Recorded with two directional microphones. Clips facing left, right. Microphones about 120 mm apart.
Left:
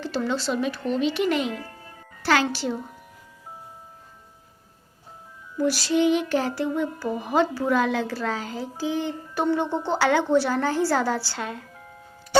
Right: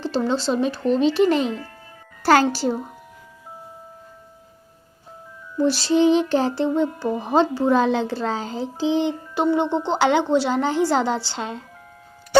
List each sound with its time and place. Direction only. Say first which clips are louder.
0.0 s speech: right 4 dB; 30° right (ahead or behind)
5.5 s a child's voice: right 4 dB; 25° right (ahead or behind)